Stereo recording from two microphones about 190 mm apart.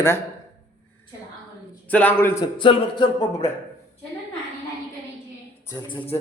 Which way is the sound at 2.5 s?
25° left (ahead or behind).